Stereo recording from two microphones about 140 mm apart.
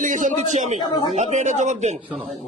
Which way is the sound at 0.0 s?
65° right (ahead or behind).